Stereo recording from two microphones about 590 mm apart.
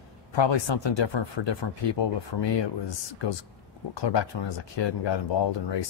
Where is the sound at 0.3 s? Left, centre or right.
Left.